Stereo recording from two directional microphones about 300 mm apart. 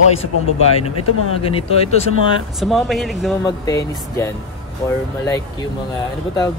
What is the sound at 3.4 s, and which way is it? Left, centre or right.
Speech, centre.